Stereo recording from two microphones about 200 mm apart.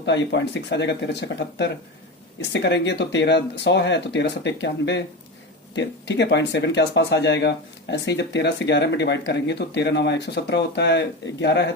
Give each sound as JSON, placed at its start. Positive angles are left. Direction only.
{"t": 0.0, "sound": "speech", "side_deg": 60}